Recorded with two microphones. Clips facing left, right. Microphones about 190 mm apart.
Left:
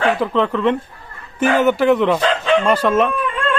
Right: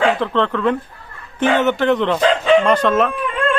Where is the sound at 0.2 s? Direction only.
5° left (ahead or behind).